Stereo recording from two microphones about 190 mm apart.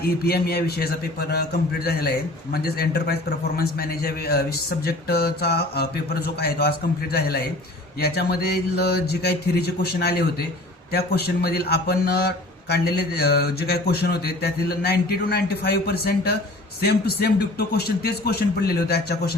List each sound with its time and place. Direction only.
0.0 s a man's voice: 55° left (ahead or behind)